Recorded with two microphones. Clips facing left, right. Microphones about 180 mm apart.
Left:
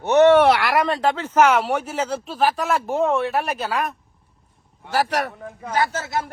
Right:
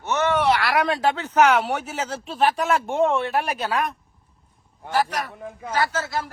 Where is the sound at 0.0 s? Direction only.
60° left (ahead or behind).